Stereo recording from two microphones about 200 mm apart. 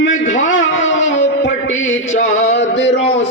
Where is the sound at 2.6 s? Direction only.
65° left (ahead or behind).